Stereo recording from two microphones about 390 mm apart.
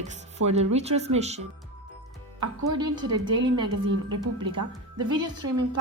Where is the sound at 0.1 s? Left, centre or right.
Centre.